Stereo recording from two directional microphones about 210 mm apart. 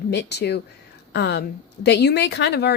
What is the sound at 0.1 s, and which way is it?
Speech, 55° left (ahead or behind).